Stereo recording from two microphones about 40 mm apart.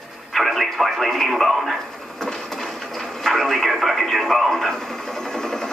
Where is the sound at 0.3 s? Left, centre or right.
Centre.